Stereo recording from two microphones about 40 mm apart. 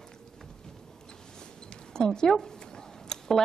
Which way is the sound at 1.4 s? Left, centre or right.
Centre.